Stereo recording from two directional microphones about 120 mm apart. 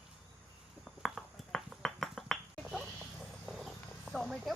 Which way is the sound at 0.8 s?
Centre (ahead or behind).